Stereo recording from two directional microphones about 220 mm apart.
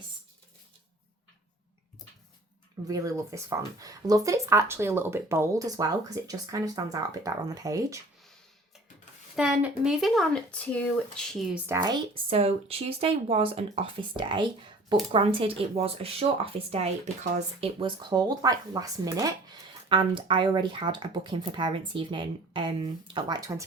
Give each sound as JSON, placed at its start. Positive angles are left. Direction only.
{"t": 2.8, "sound": "speech", "side_deg": -15}
{"t": 9.3, "sound": "speech", "side_deg": -5}
{"t": 11.6, "sound": "speech", "side_deg": -15}